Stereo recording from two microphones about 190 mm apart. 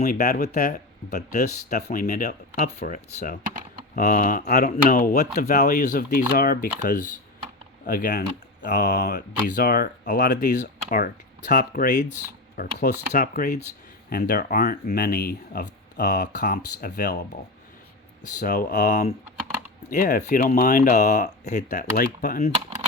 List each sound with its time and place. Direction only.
0.0 s speech: 45° left (ahead or behind)
10.8 s speech: 50° left (ahead or behind)
18.3 s speech: 50° left (ahead or behind)